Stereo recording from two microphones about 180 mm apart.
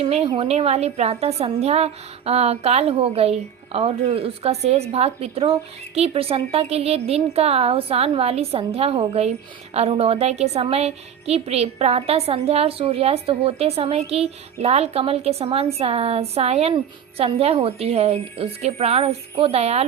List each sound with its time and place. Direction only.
0.0 s a woman's voice: 35° right (ahead or behind)